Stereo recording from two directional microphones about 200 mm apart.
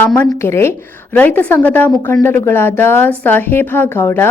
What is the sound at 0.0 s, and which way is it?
Speech, 10° left (ahead or behind).